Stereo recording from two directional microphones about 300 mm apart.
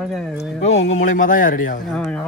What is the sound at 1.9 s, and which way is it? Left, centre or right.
Speech, centre.